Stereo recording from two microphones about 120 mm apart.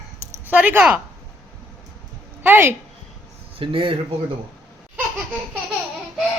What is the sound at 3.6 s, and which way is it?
Speech, 45° right (ahead or behind).